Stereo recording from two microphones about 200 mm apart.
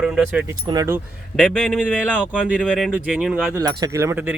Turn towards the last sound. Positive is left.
turn(degrees=-10)  # may be behind; listen again after turning